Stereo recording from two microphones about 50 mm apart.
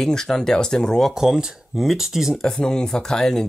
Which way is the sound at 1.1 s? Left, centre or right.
Centre.